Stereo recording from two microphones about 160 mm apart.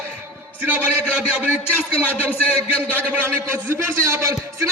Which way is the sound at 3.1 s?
20° right (ahead or behind).